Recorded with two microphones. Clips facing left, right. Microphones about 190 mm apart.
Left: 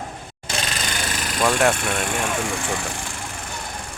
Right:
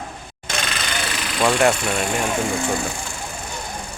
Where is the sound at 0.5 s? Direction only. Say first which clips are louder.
Right 1 dB; 35° left (ahead or behind).